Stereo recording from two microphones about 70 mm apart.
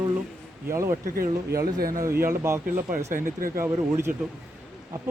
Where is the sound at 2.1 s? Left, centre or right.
Right.